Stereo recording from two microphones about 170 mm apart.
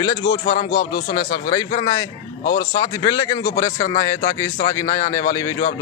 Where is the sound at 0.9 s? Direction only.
65° left (ahead or behind).